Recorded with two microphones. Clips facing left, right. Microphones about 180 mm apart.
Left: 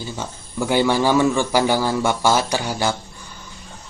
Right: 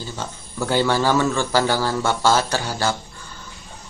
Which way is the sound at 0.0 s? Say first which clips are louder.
Left 1 dB; 15° left (ahead or behind).